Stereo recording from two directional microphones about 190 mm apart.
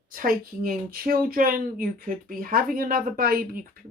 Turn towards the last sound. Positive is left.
turn(degrees=-50)  # may be behind; listen again after turning